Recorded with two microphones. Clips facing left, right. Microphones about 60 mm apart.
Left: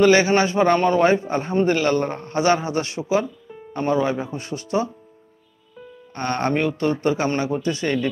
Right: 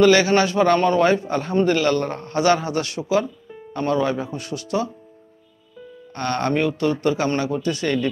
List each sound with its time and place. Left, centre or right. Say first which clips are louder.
0.0 s a man's voice: even; left
6.1 s a man's voice: even; left